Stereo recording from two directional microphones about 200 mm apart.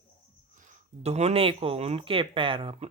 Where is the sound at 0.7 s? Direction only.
30° right (ahead or behind).